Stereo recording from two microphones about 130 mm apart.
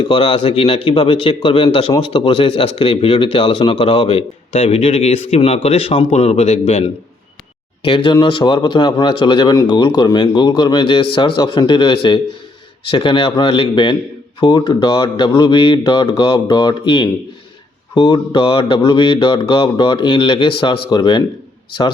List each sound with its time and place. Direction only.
0.0 s speech: 45° left (ahead or behind)
7.9 s speech: 40° left (ahead or behind)